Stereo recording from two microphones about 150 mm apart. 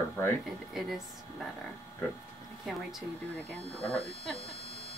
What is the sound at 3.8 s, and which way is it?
Speech, 40° left (ahead or behind).